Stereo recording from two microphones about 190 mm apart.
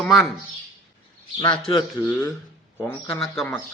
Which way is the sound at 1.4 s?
25° left (ahead or behind).